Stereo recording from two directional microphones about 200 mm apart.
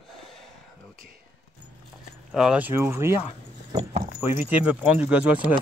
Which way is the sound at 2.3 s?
5° right (ahead or behind).